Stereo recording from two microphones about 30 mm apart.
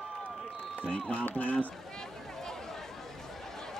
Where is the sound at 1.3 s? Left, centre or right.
Left.